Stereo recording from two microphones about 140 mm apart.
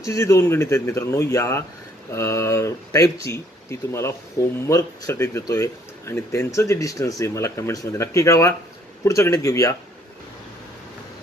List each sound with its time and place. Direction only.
0.0 s speech: 25° left (ahead or behind)